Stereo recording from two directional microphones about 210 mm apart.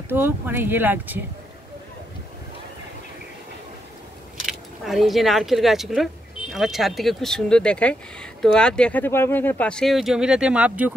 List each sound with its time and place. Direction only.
0.1 s speech: 10° right (ahead or behind)
4.5 s speech: centre (ahead or behind)